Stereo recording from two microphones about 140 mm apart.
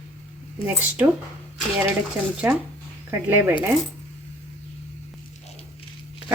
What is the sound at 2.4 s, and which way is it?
Speech, 10° right (ahead or behind).